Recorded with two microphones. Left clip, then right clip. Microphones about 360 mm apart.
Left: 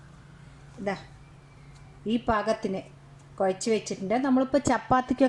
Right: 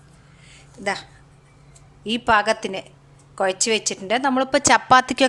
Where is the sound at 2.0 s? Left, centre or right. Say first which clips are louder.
Right 8 dB; right.